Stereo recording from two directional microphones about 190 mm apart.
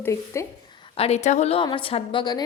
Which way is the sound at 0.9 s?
30° left (ahead or behind).